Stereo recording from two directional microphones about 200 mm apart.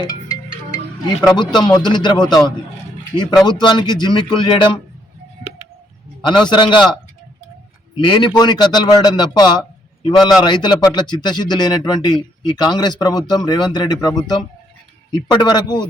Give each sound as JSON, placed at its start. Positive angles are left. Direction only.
{"t": 1.4, "sound": "a man's voice", "side_deg": 20}
{"t": 6.2, "sound": "a man's voice", "side_deg": 20}
{"t": 8.0, "sound": "a man's voice", "side_deg": 20}